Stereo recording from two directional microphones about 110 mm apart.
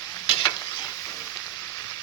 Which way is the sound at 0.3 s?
55° left (ahead or behind).